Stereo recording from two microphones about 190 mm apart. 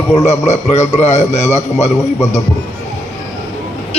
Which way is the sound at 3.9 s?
30° left (ahead or behind).